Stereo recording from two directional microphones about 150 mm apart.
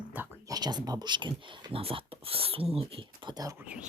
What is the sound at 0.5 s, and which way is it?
Speech, 25° right (ahead or behind).